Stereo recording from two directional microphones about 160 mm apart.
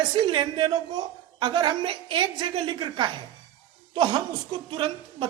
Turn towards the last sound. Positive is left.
turn(degrees=-30)  # may be behind; listen again after turning